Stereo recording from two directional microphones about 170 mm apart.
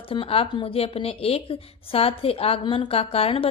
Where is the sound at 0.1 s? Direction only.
35° left (ahead or behind).